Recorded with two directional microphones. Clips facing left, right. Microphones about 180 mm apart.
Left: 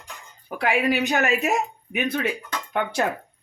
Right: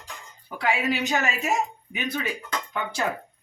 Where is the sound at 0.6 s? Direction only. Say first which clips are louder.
Left 3 dB; 60° left (ahead or behind).